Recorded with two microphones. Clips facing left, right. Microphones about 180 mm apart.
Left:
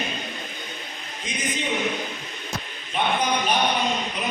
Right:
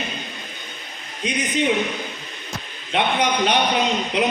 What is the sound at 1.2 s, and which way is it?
Speech, 70° right (ahead or behind).